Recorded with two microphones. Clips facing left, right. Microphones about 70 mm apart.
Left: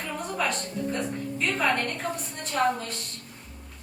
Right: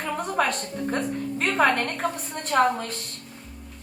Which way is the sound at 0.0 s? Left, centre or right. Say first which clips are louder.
Right 4 dB; right.